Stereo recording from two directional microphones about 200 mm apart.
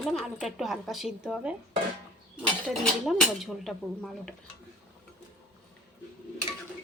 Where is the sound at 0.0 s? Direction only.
Centre (ahead or behind).